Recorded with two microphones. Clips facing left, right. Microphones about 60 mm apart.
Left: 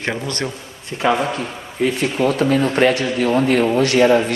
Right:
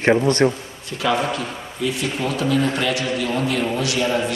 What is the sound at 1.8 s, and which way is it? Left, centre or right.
A man's voice, left.